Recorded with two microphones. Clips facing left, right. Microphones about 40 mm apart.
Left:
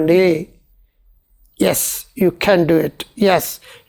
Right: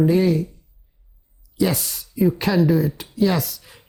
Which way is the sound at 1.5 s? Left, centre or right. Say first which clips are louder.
Left 5 dB; left.